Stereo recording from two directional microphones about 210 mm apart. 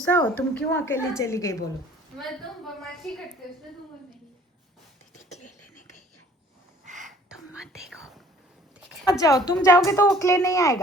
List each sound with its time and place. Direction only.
0.0 s a woman's voice: 10° left (ahead or behind)
3.1 s a woman's voice: 5° left (ahead or behind)
5.1 s a sound: 35° left (ahead or behind)
6.8 s a sound: 35° right (ahead or behind)
7.3 s whispering: 5° right (ahead or behind)
9.1 s a woman's voice: 15° left (ahead or behind)